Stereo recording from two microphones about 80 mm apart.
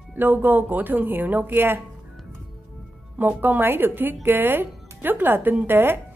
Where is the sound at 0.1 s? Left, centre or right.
Right.